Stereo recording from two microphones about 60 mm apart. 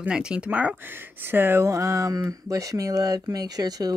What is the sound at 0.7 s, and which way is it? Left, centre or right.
Speech, right.